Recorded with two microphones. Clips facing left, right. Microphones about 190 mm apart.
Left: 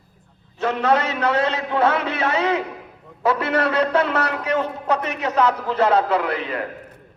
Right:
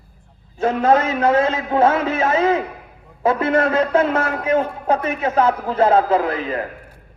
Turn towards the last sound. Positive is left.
turn(degrees=-45)  # may be behind; listen again after turning